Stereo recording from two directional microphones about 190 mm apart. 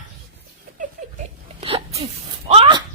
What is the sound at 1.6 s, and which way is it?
Sneeze, 30° right (ahead or behind).